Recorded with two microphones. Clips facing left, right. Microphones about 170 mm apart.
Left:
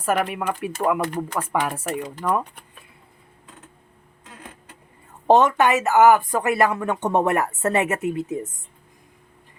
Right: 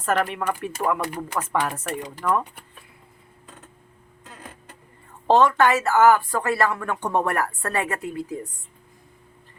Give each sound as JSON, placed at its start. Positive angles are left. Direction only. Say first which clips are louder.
{"t": 0.0, "sound": "speech", "louder": "left 1 dB", "side_deg": 10}
{"t": 1.0, "sound": "speech", "louder": "left 4 dB", "side_deg": -10}
{"t": 1.4, "sound": "speech", "louder": "right 1 dB", "side_deg": 10}
{"t": 5.3, "sound": "speech", "louder": "left 1 dB", "side_deg": 20}